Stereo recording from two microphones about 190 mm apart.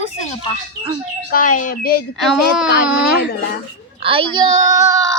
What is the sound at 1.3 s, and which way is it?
Speech, 45° left (ahead or behind).